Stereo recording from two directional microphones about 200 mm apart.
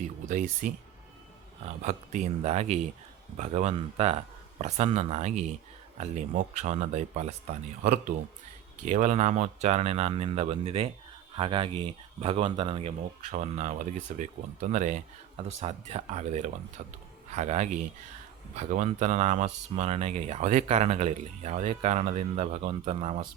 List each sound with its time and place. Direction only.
0.3 s speech: 40° right (ahead or behind)
8.8 s speech: 40° right (ahead or behind)